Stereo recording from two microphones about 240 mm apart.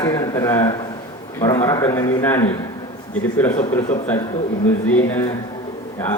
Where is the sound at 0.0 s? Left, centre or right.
Centre.